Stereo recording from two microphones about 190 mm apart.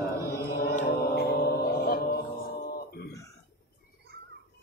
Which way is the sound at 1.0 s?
60° left (ahead or behind).